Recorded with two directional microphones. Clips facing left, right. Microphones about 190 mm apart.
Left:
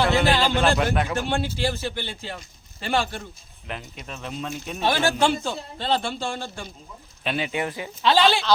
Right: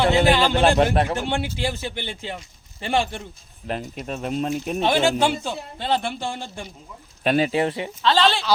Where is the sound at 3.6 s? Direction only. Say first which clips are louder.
Right 7 dB; 40° right (ahead or behind).